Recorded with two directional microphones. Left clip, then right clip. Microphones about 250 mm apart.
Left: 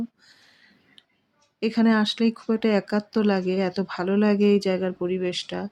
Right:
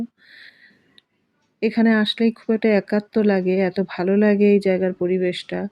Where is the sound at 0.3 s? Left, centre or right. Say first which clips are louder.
Right 9 dB; left.